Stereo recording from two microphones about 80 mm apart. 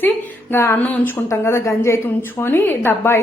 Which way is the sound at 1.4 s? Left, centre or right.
Left.